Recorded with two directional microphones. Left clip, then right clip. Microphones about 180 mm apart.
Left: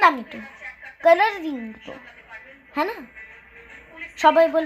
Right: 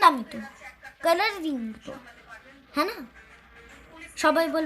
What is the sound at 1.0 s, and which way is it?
Speech, 30° right (ahead or behind).